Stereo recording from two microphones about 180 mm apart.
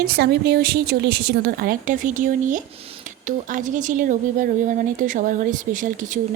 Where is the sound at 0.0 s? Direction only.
60° right (ahead or behind).